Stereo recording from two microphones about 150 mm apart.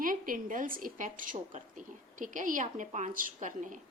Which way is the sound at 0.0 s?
65° right (ahead or behind).